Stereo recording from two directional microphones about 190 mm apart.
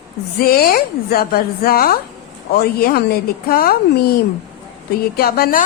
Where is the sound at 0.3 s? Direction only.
55° left (ahead or behind).